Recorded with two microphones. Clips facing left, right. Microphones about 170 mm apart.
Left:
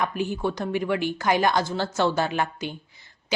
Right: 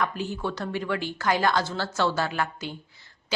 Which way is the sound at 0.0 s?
15° left (ahead or behind).